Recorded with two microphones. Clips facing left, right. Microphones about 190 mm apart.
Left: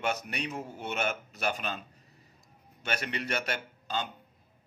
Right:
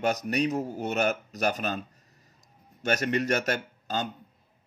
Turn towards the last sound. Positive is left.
turn(degrees=-40)  # may be behind; listen again after turning